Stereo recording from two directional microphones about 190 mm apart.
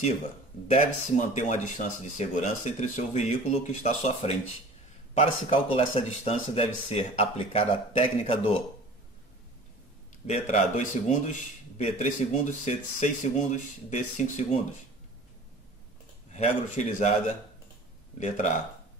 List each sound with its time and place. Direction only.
0.7 s speech: 40° left (ahead or behind)
10.2 s speech: 40° left (ahead or behind)
16.3 s speech: 40° left (ahead or behind)
18.2 s speech: 40° left (ahead or behind)